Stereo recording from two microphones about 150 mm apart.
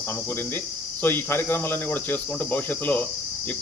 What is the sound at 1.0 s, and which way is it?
Cricket, 15° left (ahead or behind).